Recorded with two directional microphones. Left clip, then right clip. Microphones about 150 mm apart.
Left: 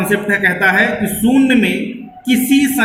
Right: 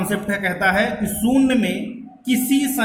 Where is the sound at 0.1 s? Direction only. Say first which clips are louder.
Left 10 dB; 40° right (ahead or behind).